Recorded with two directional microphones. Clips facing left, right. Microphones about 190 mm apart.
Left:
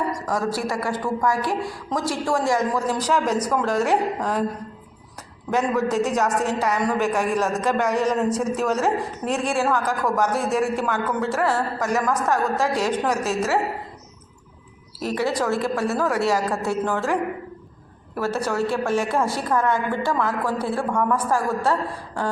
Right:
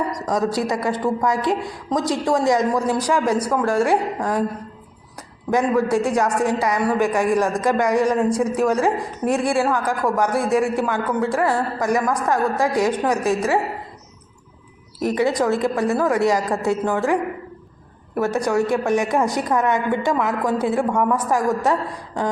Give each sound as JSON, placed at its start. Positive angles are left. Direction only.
{"t": 0.3, "sound": "a man's voice", "side_deg": -20}
{"t": 5.5, "sound": "a man's voice", "side_deg": -10}
{"t": 14.9, "sound": "a man's voice", "side_deg": -15}
{"t": 18.2, "sound": "a man's voice", "side_deg": -15}